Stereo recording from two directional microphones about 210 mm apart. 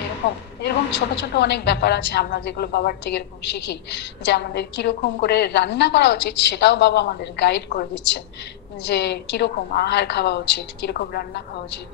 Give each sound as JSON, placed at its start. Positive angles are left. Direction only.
{"t": 0.6, "sound": "a woman's voice", "side_deg": 55}